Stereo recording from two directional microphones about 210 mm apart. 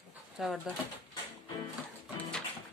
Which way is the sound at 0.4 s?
Centre (ahead or behind).